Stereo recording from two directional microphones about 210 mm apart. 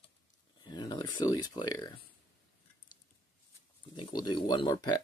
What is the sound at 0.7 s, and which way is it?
Speech, 20° left (ahead or behind).